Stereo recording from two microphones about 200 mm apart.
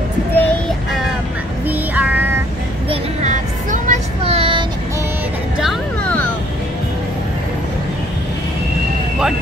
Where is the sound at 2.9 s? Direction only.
35° right (ahead or behind).